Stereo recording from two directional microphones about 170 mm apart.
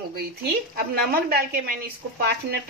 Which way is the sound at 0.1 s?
65° right (ahead or behind).